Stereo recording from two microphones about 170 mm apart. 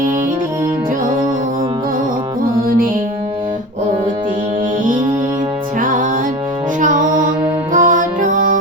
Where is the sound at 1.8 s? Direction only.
55° right (ahead or behind).